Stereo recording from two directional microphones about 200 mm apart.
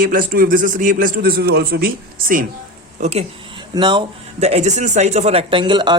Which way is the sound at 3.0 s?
35° right (ahead or behind).